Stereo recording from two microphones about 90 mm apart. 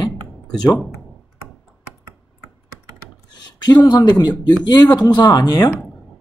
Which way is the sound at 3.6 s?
55° left (ahead or behind).